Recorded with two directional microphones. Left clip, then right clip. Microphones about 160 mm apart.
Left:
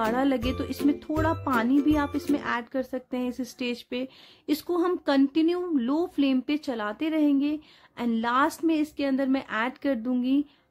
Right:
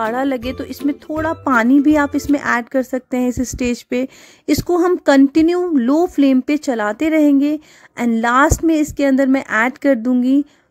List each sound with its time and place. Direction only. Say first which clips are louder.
0.0 s speech: right 7 dB; 50° right (ahead or behind)